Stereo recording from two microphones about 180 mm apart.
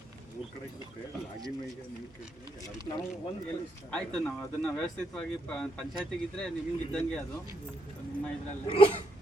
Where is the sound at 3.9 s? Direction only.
Centre (ahead or behind).